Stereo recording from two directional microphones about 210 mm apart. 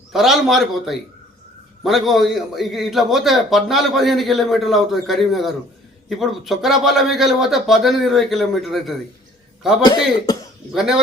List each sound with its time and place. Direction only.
0.1 s a man's voice: centre (ahead or behind)
9.8 s speech: 20° left (ahead or behind)
10.8 s a man's voice: centre (ahead or behind)